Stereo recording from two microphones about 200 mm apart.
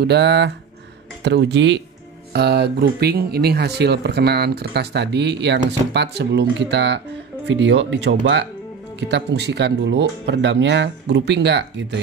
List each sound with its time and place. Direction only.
0.0 s speech: 60° right (ahead or behind)
9.1 s speech: 55° right (ahead or behind)